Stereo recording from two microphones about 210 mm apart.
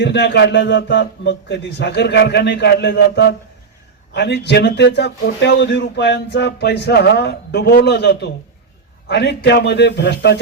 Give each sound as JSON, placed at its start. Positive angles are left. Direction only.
{"t": 0.0, "sound": "a man's voice", "side_deg": 55}